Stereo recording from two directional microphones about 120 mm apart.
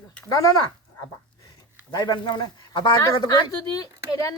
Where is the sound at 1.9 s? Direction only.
35° left (ahead or behind).